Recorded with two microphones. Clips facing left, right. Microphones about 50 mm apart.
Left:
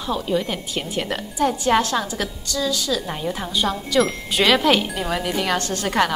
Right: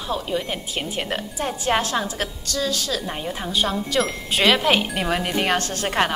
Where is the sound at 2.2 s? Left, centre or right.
Right.